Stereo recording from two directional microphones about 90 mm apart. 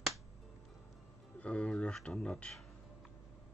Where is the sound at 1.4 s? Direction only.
15° left (ahead or behind).